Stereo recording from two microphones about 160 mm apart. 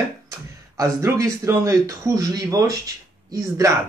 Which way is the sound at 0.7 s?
20° right (ahead or behind).